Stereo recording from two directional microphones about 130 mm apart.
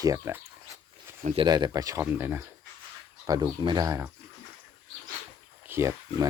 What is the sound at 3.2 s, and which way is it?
Speech, 30° right (ahead or behind).